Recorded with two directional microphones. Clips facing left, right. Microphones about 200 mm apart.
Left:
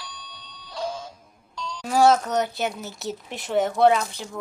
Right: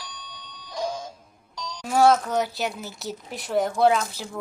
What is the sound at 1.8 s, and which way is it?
Speech, centre (ahead or behind).